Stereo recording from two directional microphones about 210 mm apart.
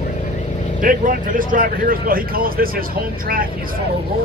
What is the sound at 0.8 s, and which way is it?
Speech, 40° right (ahead or behind).